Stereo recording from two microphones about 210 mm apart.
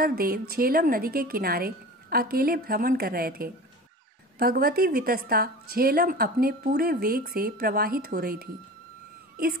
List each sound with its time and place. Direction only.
0.0 s a woman's voice: 45° right (ahead or behind)